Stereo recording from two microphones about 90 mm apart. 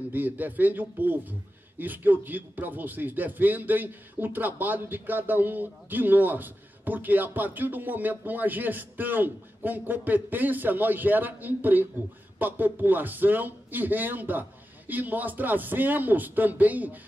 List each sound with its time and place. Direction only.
0.1 s speech: 20° right (ahead or behind)